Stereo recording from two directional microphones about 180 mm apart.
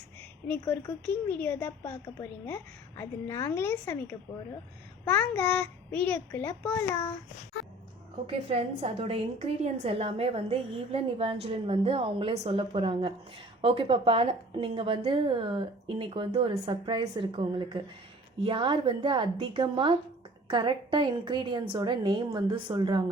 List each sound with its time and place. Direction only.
0.2 s a woman's voice: 10° left (ahead or behind)
8.3 s a woman's voice: 30° right (ahead or behind)